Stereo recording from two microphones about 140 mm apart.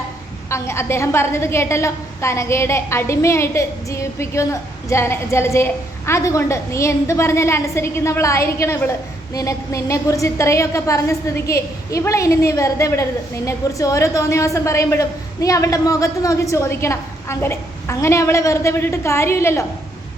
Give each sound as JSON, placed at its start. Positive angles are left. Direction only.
{"t": 0.5, "sound": "a woman's voice", "side_deg": 20}